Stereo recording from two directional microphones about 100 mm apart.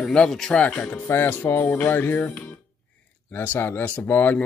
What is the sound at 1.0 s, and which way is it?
Speech, 20° left (ahead or behind).